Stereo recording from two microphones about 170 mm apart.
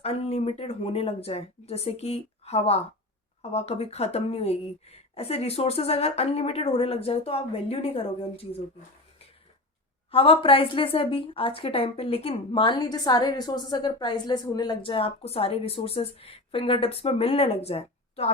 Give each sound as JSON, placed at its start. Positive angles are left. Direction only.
{"t": 0.0, "sound": "a woman's voice", "side_deg": 35}
{"t": 10.1, "sound": "a woman's voice", "side_deg": 35}